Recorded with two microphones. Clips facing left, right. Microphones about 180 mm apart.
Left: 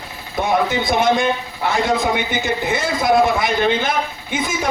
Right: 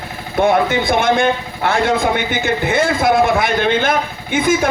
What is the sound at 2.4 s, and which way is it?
A man's voice, 60° right (ahead or behind).